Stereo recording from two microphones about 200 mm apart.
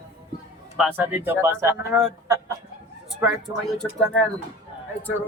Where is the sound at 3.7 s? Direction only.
5° left (ahead or behind).